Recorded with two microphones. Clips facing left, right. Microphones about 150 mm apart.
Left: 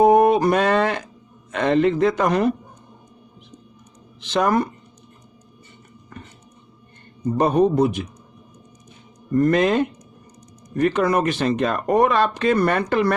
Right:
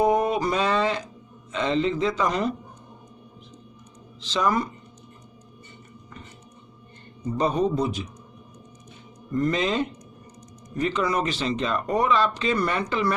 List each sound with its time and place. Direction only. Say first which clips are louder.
0.0 s a sound: left 7 dB; 65° left (ahead or behind)
1.5 s speech: left 6 dB; 60° left (ahead or behind)
4.2 s speech: left 5 dB; 60° left (ahead or behind)
7.3 s speech: left 6 dB; 60° left (ahead or behind)
9.3 s speech: left 7 dB; 55° left (ahead or behind)